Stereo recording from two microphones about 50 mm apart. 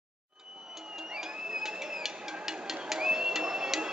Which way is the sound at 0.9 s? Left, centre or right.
Centre.